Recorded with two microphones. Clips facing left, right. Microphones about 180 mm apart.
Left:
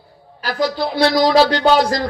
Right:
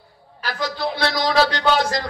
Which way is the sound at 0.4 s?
35° left (ahead or behind).